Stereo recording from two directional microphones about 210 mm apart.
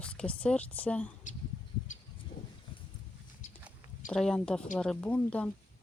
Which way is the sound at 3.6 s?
5° right (ahead or behind).